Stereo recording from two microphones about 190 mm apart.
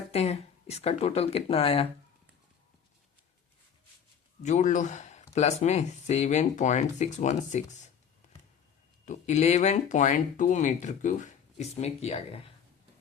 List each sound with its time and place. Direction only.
0.1 s speech: 35° left (ahead or behind)
4.4 s speech: 40° left (ahead or behind)
9.0 s speech: 35° left (ahead or behind)